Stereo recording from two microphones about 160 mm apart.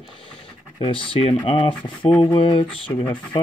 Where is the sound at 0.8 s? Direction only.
35° left (ahead or behind).